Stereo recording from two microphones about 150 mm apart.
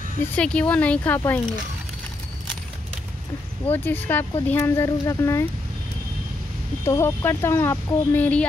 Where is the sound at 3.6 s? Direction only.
10° left (ahead or behind).